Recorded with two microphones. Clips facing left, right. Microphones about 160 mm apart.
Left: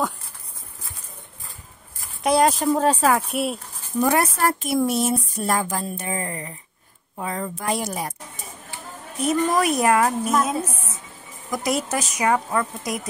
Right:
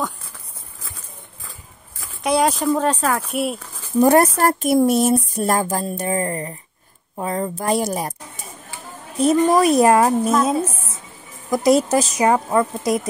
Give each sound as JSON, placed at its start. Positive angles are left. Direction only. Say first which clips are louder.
{"t": 2.2, "sound": "speech", "louder": "even", "side_deg": 0}
{"t": 4.0, "sound": "speech", "louder": "right 6 dB", "side_deg": -40}
{"t": 9.2, "sound": "speech", "louder": "right 6 dB", "side_deg": -35}
{"t": 11.5, "sound": "speech", "louder": "right 9 dB", "side_deg": -35}